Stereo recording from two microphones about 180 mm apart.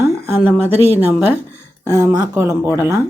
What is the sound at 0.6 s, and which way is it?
Speech, 10° right (ahead or behind).